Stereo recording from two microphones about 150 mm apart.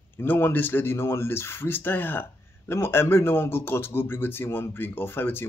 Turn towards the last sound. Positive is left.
turn(degrees=15)  # may be behind; listen again after turning